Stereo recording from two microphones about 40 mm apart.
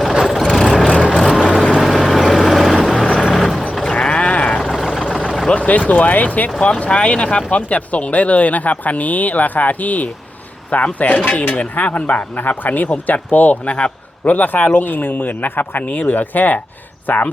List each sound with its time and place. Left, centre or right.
0.1 s vehicle: centre
0.3 s vehicle: centre
4.0 s sheep: left
4.6 s vehicle: centre
5.5 s a sound: left
5.9 s speech: left
6.6 s speech: left